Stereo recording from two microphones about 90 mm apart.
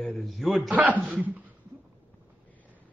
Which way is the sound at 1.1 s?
15° right (ahead or behind).